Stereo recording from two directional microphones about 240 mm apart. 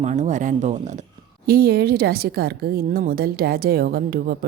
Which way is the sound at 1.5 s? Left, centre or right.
Right.